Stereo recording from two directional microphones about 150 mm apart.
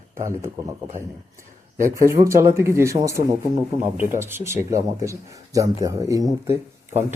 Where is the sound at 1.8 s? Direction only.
20° right (ahead or behind).